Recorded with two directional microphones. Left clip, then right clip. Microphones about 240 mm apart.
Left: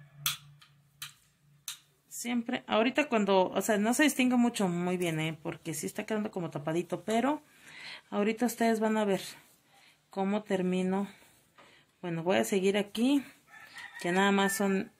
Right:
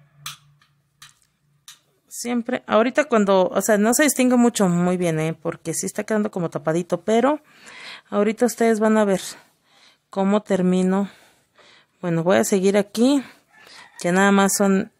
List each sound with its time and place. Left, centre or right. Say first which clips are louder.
2.0 s a woman's voice: right 10 dB; right